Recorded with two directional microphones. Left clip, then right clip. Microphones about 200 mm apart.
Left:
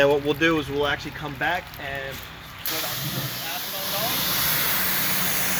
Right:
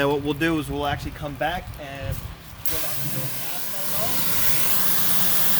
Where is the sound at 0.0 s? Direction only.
60° right (ahead or behind).